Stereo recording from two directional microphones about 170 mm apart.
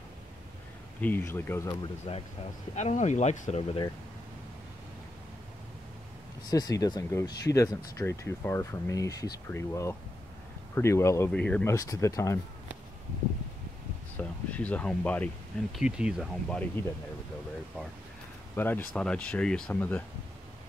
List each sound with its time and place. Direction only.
1.0 s speech: 10° left (ahead or behind)
2.7 s speech: 45° left (ahead or behind)
6.5 s speech: 20° left (ahead or behind)
11.7 s speech: 20° left (ahead or behind)
14.1 s speech: 10° left (ahead or behind)
15.8 s speech: 5° right (ahead or behind)
18.6 s speech: 10° left (ahead or behind)